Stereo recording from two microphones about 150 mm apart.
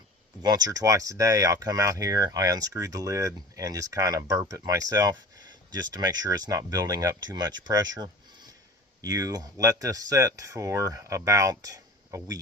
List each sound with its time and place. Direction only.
0.4 s speech: 25° right (ahead or behind)